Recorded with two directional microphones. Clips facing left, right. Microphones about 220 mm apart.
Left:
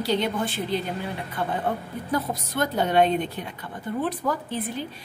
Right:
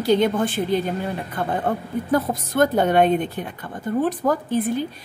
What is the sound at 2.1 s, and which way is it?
A woman's voice, 50° right (ahead or behind).